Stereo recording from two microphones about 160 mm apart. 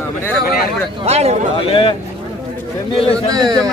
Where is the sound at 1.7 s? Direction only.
35° left (ahead or behind).